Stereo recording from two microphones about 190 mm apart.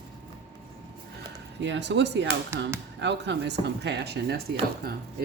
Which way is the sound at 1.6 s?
65° right (ahead or behind).